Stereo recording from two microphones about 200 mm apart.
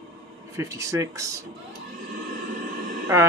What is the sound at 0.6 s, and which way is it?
Speech, 15° right (ahead or behind).